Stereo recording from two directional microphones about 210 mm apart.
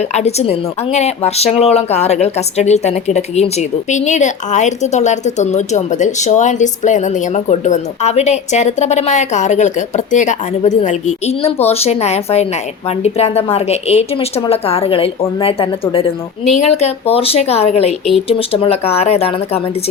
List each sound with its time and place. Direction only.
0.0 s a woman's voice: 30° left (ahead or behind)